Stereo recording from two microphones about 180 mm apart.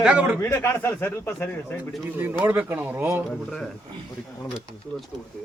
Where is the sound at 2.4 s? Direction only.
10° right (ahead or behind).